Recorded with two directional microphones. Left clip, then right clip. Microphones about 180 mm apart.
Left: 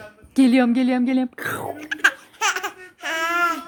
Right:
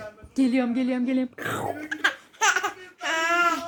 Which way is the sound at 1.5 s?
35° left (ahead or behind).